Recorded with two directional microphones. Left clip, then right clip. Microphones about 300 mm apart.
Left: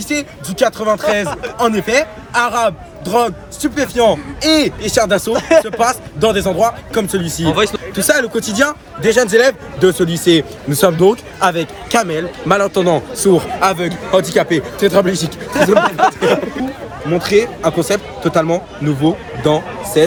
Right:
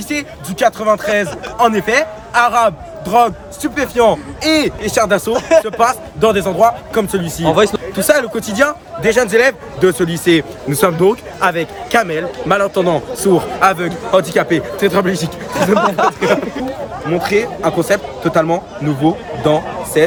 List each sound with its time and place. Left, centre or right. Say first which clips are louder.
0.2 s a man's voice: right 2 dB; centre
5.3 s speech: left 1 dB; left
5.6 s a man's voice: right 1 dB; centre
7.4 s a man's voice: right 3 dB; right
7.9 s a man's voice: even; centre
15.5 s speech: left 1 dB; left
17.6 s a man's voice: right 1 dB; centre